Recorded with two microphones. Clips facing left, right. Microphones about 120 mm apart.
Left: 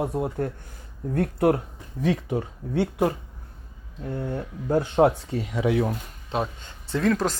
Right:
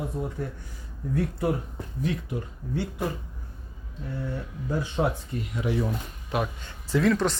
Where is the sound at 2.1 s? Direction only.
75° left (ahead or behind).